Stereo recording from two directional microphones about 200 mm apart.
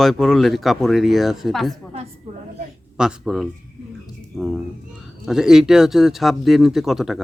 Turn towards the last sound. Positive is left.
turn(degrees=0)  # may be behind; listen again after turning